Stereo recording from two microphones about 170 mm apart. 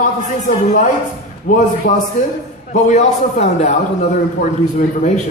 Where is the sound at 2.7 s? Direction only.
45° left (ahead or behind).